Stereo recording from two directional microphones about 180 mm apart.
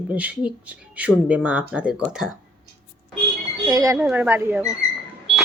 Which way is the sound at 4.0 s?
10° right (ahead or behind).